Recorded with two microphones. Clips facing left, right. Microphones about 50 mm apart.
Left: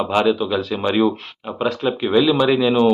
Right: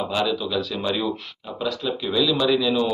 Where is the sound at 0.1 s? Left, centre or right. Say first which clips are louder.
Left 8 dB; left.